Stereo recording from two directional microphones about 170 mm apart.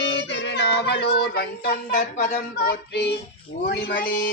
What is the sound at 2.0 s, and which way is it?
Speech, 45° left (ahead or behind).